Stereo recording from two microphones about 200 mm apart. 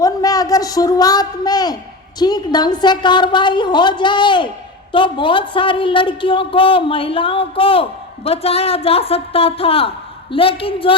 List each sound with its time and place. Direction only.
0.0 s a man's voice: 15° left (ahead or behind)